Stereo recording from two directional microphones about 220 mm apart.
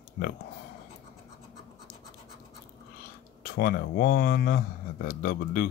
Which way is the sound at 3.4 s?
40° left (ahead or behind).